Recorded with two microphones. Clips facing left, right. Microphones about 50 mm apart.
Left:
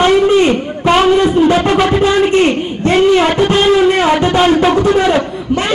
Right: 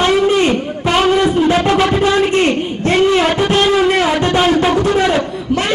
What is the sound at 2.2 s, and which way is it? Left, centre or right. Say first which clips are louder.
A man's voice: left 2 dB; centre.